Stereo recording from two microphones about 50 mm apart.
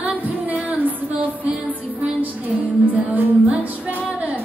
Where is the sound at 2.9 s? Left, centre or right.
Right.